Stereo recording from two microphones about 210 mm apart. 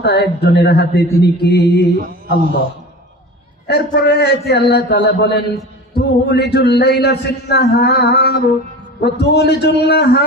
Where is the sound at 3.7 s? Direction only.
50° left (ahead or behind).